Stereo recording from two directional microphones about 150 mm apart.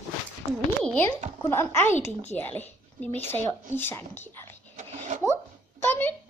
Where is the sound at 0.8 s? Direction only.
5° left (ahead or behind).